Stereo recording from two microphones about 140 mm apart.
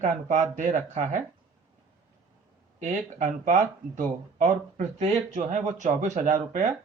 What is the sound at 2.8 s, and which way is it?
Speech, 60° right (ahead or behind).